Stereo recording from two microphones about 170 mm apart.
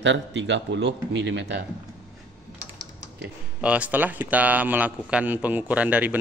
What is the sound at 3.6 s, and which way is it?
A man's voice, 10° right (ahead or behind).